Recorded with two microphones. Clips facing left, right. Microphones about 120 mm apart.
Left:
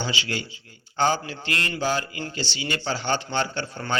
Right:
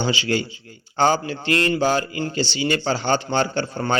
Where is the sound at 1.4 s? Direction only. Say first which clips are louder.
Right 8 dB; 35° right (ahead or behind).